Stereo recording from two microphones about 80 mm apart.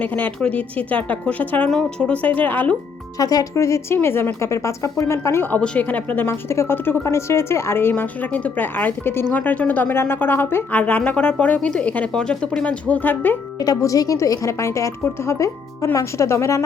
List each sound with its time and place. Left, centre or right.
0.0 s speech: centre
3.2 s a woman's voice: left
5.5 s a woman's voice: centre
13.6 s a woman's voice: left